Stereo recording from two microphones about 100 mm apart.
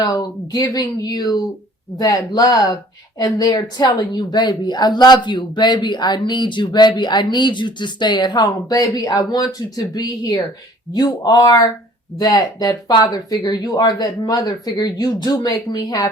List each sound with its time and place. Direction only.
0.0 s a woman's voice: 40° left (ahead or behind)